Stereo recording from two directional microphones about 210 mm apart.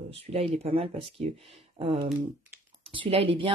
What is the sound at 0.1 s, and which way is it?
Speech, 30° right (ahead or behind).